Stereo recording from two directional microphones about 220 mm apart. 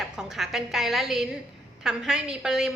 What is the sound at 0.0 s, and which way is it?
A woman's voice, centre (ahead or behind).